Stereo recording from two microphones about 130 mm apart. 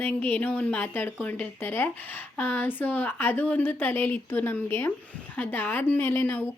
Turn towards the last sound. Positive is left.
turn(degrees=15)  # may be behind; listen again after turning